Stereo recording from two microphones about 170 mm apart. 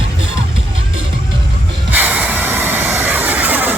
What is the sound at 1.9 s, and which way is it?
Vehicle, 10° right (ahead or behind).